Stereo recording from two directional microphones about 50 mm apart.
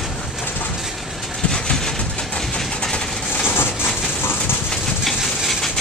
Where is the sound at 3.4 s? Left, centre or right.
Left.